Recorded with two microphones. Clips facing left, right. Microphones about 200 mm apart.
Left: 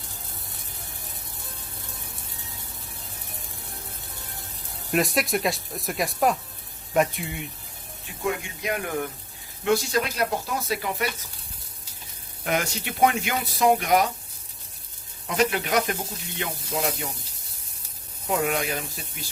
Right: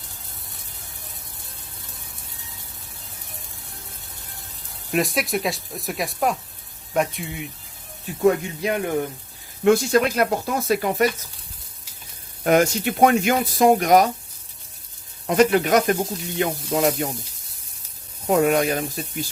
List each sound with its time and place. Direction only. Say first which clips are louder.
4.9 s speech: right 1 dB; centre (ahead or behind)
8.2 s speech: right 10 dB; 40° right (ahead or behind)
8.7 s speech: right 4 dB; 25° right (ahead or behind)
9.6 s speech: right 7 dB; 50° right (ahead or behind)
12.5 s speech: right 9 dB; 45° right (ahead or behind)
15.3 s speech: right 7 dB; 50° right (ahead or behind)
18.3 s speech: right 7 dB; 45° right (ahead or behind)